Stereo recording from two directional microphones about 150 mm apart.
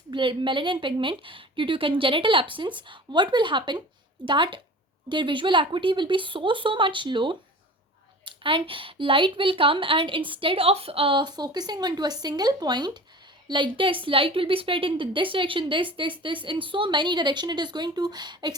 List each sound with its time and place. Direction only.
0.1 s a woman's voice: 35° right (ahead or behind)